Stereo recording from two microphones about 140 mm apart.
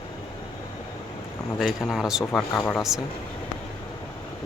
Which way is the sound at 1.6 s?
Centre (ahead or behind).